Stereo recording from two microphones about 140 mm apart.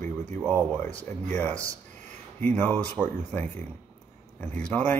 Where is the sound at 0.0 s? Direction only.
55° right (ahead or behind).